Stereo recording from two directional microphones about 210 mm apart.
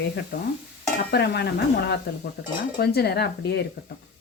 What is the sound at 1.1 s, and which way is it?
Stir, 50° left (ahead or behind).